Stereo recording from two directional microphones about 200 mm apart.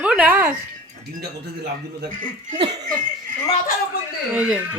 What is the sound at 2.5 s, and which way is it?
Laughter, 25° right (ahead or behind).